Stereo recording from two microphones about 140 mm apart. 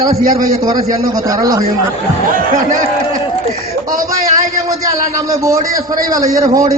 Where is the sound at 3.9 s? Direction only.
70° right (ahead or behind).